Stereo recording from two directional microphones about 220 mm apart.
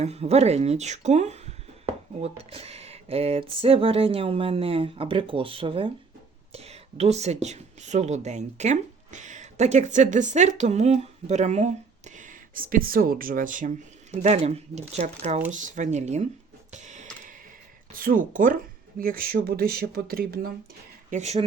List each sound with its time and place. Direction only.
0.0 s speech: 30° right (ahead or behind)
16.7 s a sound: 35° right (ahead or behind)
17.9 s speech: 40° right (ahead or behind)
21.1 s speech: 30° right (ahead or behind)